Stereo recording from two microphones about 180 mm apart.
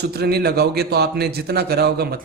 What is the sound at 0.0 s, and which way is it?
A man's voice, 60° right (ahead or behind).